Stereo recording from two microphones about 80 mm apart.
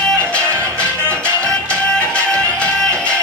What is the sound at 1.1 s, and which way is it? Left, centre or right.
Music, centre.